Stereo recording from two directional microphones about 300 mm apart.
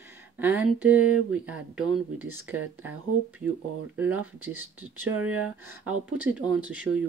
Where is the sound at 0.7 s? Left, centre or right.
Centre.